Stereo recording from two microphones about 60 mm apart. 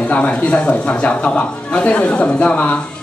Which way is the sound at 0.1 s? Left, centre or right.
Left.